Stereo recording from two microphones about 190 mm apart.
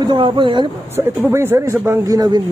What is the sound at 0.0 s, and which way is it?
Speech, 25° right (ahead or behind).